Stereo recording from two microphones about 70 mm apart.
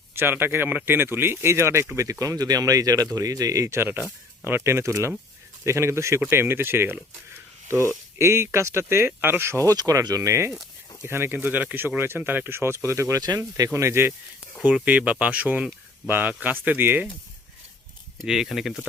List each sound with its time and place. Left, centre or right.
0.1 s speech: right
2.0 s speech: right
3.8 s speech: right
7.9 s speech: right
9.6 s speech: right
10.2 s speech: right
11.0 s speech: right
13.1 s speech: right
13.7 s speech: right
14.8 s speech: centre
18.2 s speech: centre